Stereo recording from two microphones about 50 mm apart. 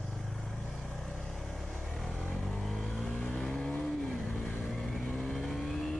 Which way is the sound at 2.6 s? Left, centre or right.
Centre.